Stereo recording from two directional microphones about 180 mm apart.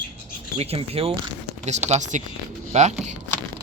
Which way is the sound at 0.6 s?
35° right (ahead or behind).